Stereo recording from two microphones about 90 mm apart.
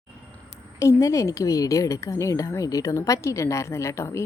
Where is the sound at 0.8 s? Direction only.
35° left (ahead or behind).